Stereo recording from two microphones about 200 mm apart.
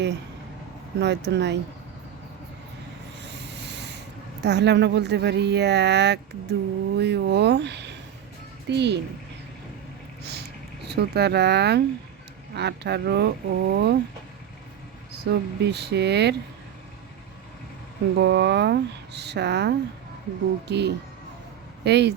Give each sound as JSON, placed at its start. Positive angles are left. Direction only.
{"t": 0.9, "sound": "speech", "side_deg": -60}
{"t": 3.2, "sound": "a sound", "side_deg": -60}
{"t": 4.4, "sound": "speech", "side_deg": -60}
{"t": 10.8, "sound": "speech", "side_deg": -55}
{"t": 15.1, "sound": "speech", "side_deg": -55}
{"t": 18.2, "sound": "speech", "side_deg": -55}